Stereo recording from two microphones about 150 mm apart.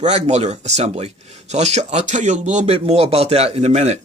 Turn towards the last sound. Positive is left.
turn(degrees=-45)  # may be behind; listen again after turning